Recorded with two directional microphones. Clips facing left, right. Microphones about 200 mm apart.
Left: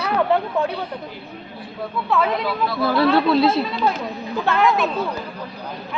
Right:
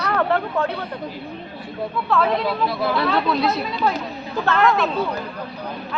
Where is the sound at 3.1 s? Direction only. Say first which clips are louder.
Left 4 dB; 30° left (ahead or behind).